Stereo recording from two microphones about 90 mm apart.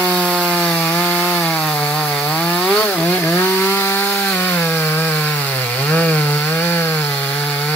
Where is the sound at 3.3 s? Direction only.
20° left (ahead or behind).